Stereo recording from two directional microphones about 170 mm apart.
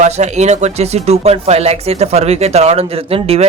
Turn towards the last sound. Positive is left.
turn(degrees=-35)  # may be behind; listen again after turning